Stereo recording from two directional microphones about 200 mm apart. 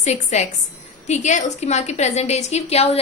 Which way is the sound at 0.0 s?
35° left (ahead or behind).